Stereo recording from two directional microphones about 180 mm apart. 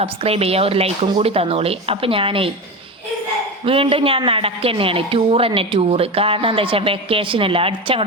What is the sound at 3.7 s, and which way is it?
A woman's voice, 30° right (ahead or behind).